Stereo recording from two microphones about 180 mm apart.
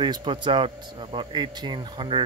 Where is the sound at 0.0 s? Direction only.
25° right (ahead or behind).